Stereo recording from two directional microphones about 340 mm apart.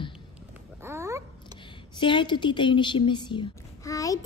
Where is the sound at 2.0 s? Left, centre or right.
Centre.